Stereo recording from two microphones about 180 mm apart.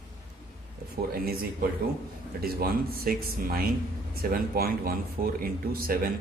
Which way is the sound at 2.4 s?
55° right (ahead or behind).